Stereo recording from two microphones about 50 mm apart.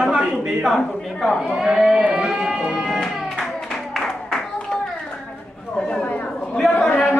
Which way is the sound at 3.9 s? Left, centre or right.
Centre.